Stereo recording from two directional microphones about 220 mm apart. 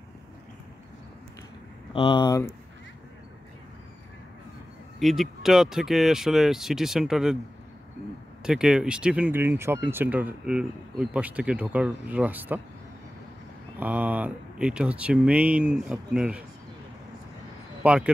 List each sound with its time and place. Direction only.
2.0 s speech: 20° left (ahead or behind)
5.0 s speech: centre (ahead or behind)
8.5 s speech: 5° right (ahead or behind)
13.7 s speech: 5° right (ahead or behind)
17.8 s speech: 5° right (ahead or behind)